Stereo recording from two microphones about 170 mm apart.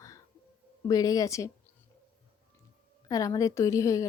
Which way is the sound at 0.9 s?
20° left (ahead or behind).